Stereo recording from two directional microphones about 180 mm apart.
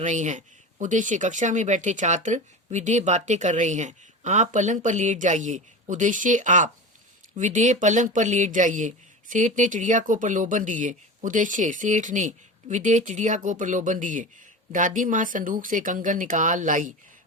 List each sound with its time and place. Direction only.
0.0 s speech: 40° right (ahead or behind)